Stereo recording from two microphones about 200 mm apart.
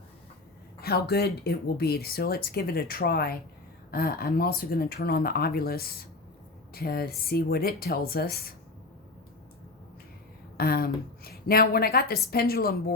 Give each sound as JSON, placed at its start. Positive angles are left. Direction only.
{"t": 0.8, "sound": "speech", "side_deg": 50}
{"t": 10.6, "sound": "speech", "side_deg": 50}